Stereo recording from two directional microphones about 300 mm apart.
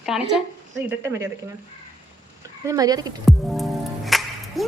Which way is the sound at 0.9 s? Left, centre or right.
Centre.